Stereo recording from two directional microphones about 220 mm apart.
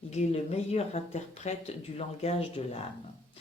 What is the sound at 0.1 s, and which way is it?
Speech, 30° left (ahead or behind).